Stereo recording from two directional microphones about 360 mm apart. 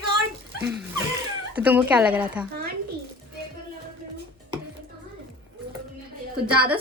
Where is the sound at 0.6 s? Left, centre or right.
Centre.